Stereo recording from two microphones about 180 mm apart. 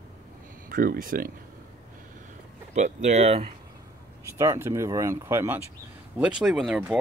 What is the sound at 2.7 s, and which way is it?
Speech, 40° right (ahead or behind).